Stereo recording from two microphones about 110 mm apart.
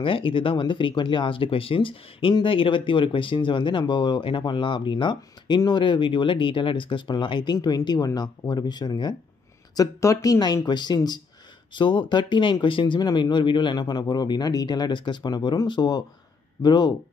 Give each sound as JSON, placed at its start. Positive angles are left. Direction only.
{"t": 0.0, "sound": "speech", "side_deg": 50}
{"t": 9.8, "sound": "speech", "side_deg": 30}